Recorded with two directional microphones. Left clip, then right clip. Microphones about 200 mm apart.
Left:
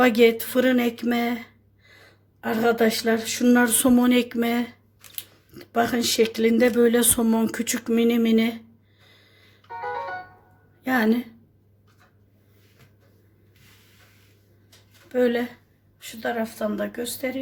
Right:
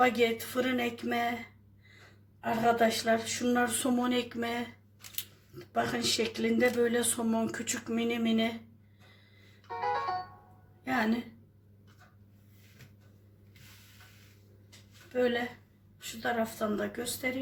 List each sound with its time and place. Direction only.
0.0 s speech: 55° left (ahead or behind)
2.4 s speech: 55° left (ahead or behind)
10.8 s speech: 50° left (ahead or behind)
15.1 s speech: 50° left (ahead or behind)
16.0 s speech: 30° left (ahead or behind)